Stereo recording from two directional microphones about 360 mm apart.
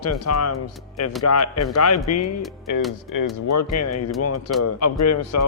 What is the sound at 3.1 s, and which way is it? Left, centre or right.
Speech, left.